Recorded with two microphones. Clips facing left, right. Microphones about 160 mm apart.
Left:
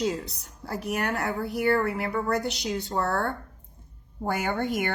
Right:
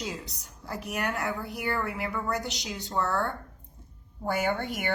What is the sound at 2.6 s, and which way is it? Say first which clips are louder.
Speech: even; 45° left (ahead or behind).